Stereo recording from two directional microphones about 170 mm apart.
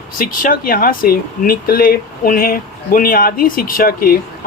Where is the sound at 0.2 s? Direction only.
55° left (ahead or behind).